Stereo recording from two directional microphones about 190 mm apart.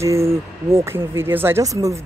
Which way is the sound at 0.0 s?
15° right (ahead or behind).